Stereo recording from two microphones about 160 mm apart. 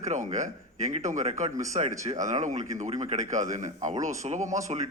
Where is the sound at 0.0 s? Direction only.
45° right (ahead or behind).